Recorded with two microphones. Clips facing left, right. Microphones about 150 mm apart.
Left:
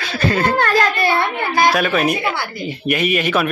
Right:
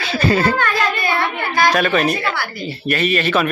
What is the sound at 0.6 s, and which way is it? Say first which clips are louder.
Speech: left 3 dB; 40° left (ahead or behind).